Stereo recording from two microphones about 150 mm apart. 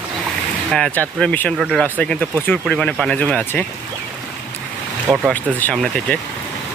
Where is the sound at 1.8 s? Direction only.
10° left (ahead or behind).